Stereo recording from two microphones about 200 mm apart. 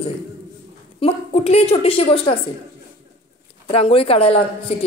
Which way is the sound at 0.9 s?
30° left (ahead or behind).